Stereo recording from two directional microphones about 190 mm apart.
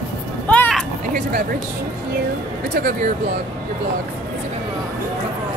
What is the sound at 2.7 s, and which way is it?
Speech, 50° right (ahead or behind).